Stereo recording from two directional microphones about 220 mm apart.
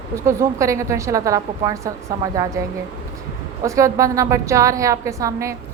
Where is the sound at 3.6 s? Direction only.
15° right (ahead or behind).